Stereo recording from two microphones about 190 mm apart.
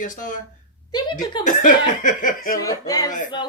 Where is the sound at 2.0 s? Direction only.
45° left (ahead or behind).